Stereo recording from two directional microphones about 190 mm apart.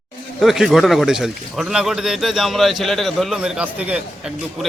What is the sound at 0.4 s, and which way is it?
Speech, centre (ahead or behind).